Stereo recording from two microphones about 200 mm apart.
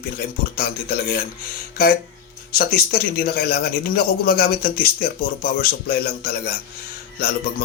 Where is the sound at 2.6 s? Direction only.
50° left (ahead or behind).